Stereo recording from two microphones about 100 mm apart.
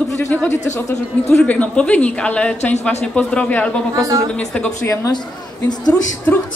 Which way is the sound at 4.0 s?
35° right (ahead or behind).